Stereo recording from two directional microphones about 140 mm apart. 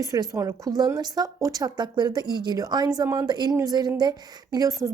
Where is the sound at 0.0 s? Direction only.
25° right (ahead or behind).